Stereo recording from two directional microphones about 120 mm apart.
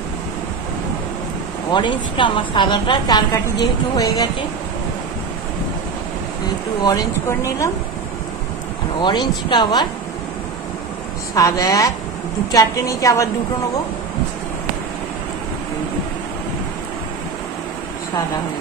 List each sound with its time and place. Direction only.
1.7 s a woman's voice: 40° left (ahead or behind)
7.2 s a woman's voice: 25° left (ahead or behind)
9.0 s a woman's voice: 40° left (ahead or behind)
11.3 s a woman's voice: 30° left (ahead or behind)